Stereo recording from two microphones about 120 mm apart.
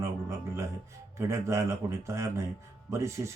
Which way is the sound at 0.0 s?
25° right (ahead or behind).